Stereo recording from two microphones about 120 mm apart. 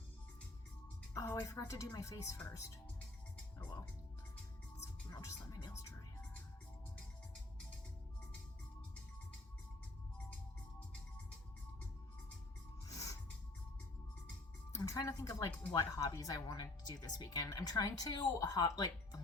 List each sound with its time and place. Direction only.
1.1 s a woman's voice: 30° left (ahead or behind)
5.1 s music: 35° left (ahead or behind)
12.9 s a sound: 30° left (ahead or behind)
14.7 s speech: 30° left (ahead or behind)